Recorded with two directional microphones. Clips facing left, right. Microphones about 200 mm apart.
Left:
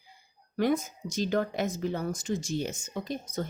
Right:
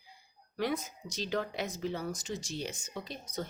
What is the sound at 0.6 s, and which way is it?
A woman's voice, 45° left (ahead or behind).